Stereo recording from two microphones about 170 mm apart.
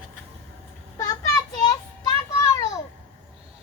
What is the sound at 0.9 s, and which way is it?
Child singing, 20° left (ahead or behind).